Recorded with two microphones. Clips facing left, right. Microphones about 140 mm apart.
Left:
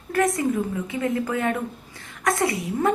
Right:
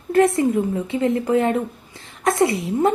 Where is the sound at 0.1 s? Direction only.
25° right (ahead or behind).